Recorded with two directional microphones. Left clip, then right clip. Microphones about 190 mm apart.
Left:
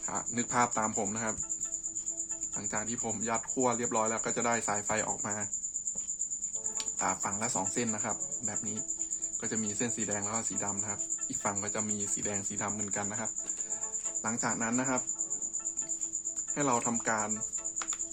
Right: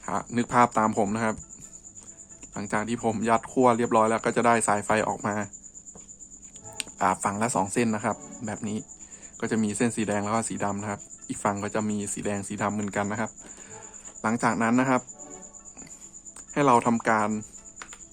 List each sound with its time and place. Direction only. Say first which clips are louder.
0.0 s speech: right 6 dB; 25° right (ahead or behind)
2.6 s speech: right 9 dB; 30° right (ahead or behind)
6.7 s speech: right 9 dB; 30° right (ahead or behind)
16.6 s speech: right 10 dB; 30° right (ahead or behind)